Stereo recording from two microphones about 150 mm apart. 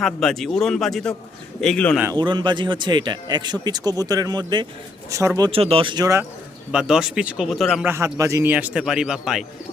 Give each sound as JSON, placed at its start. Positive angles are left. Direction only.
{"t": 0.0, "sound": "speech", "side_deg": 0}
{"t": 2.1, "sound": "speech", "side_deg": -30}
{"t": 5.5, "sound": "speech", "side_deg": -40}
{"t": 6.7, "sound": "speech", "side_deg": -5}
{"t": 7.9, "sound": "a man's voice", "side_deg": -20}